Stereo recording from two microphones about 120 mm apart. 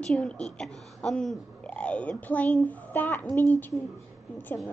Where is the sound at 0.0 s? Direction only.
5° left (ahead or behind).